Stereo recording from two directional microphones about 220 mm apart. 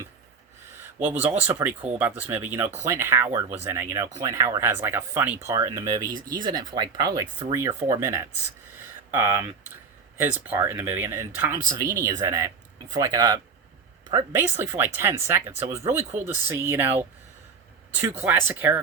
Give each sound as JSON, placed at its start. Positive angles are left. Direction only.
{"t": 0.8, "sound": "a sound", "side_deg": -10}
{"t": 1.4, "sound": "speech", "side_deg": -10}
{"t": 18.2, "sound": "speech", "side_deg": -10}